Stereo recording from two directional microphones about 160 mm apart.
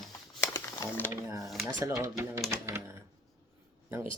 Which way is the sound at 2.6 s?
15° right (ahead or behind).